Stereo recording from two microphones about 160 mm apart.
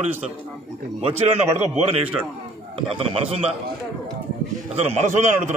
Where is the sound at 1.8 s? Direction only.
40° right (ahead or behind).